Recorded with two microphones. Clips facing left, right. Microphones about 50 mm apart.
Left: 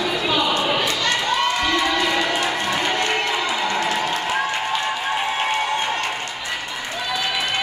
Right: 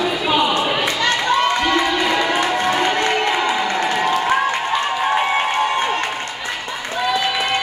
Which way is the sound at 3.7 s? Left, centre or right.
Right.